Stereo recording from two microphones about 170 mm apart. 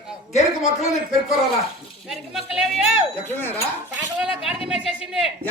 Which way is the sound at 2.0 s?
Centre (ahead or behind).